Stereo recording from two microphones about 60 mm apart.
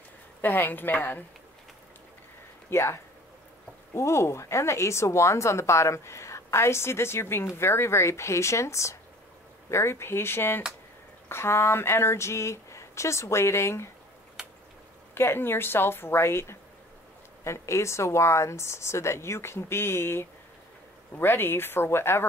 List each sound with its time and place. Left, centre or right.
0.4 s a woman's voice: left
2.7 s speech: left
14.4 s a sound: centre
15.1 s a woman's voice: left